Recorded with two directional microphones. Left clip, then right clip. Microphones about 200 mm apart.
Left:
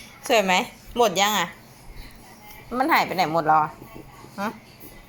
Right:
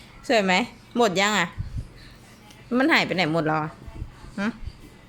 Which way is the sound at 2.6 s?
40° right (ahead or behind).